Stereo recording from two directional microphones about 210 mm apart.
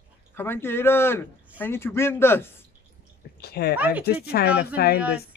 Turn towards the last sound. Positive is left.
turn(degrees=50)  # may be behind; listen again after turning